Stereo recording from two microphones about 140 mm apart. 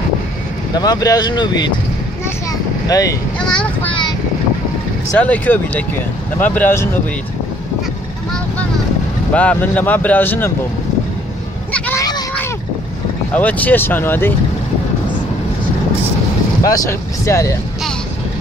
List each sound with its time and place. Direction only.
0.7 s speech: 30° left (ahead or behind)
2.9 s speech: 25° left (ahead or behind)
3.3 s child singing: 5° left (ahead or behind)
5.2 s speech: 10° left (ahead or behind)
9.3 s speech: 10° left (ahead or behind)
11.7 s a sound: 10° left (ahead or behind)
12.0 s a sound: 30° left (ahead or behind)
13.3 s speech: 10° left (ahead or behind)
16.6 s speech: 20° left (ahead or behind)